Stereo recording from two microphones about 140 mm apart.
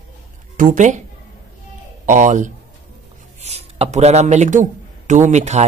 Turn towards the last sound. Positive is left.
turn(degrees=-55)  # may be behind; listen again after turning